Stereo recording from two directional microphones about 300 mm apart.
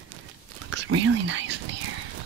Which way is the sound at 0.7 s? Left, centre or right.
Right.